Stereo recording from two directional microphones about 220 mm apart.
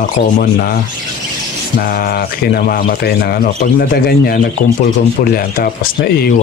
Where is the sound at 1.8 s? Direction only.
40° left (ahead or behind).